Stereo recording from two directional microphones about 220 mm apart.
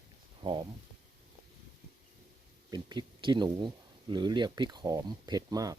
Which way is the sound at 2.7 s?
20° right (ahead or behind).